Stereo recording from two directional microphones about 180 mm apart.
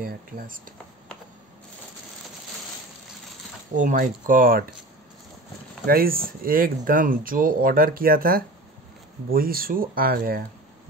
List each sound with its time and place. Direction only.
0.0 s speech: 55° right (ahead or behind)
3.7 s speech: 45° right (ahead or behind)
5.9 s speech: 55° right (ahead or behind)